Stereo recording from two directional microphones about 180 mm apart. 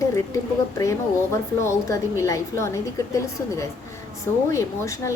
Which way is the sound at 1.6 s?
15° left (ahead or behind).